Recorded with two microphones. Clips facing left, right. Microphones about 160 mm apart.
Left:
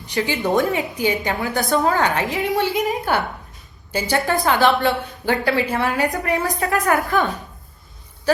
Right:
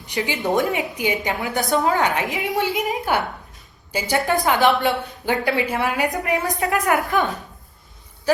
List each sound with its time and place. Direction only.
0.1 s a woman's voice: 20° right (ahead or behind)